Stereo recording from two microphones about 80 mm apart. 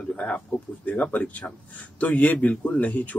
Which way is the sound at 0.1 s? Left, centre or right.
Centre.